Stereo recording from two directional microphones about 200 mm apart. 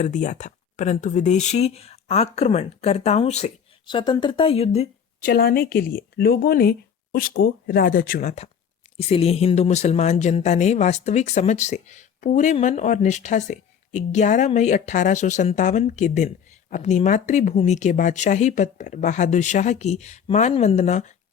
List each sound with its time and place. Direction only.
0.0 s speech: 40° left (ahead or behind)
5.2 s speech: 50° left (ahead or behind)